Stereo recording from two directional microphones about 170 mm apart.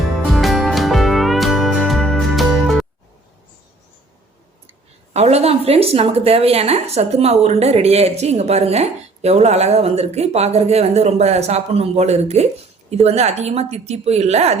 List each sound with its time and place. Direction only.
0.3 s music: centre (ahead or behind)
5.1 s a woman's voice: 40° right (ahead or behind)